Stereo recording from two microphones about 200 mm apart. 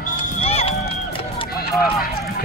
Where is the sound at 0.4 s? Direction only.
30° left (ahead or behind).